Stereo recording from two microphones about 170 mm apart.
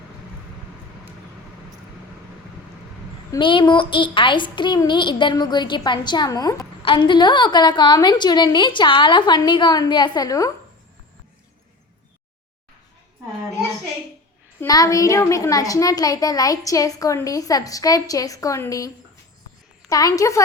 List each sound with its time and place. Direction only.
3.3 s a child's voice: 30° left (ahead or behind)
14.7 s a child's voice: 20° left (ahead or behind)
19.9 s a child's voice: 20° left (ahead or behind)